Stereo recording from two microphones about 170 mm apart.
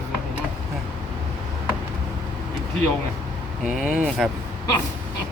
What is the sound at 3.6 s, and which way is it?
Speech, 5° right (ahead or behind).